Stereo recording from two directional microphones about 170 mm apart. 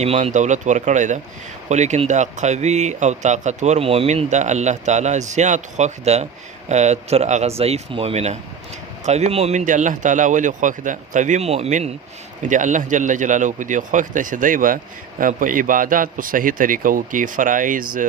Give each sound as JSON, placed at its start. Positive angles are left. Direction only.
{"t": 0.0, "sound": "speech", "side_deg": -40}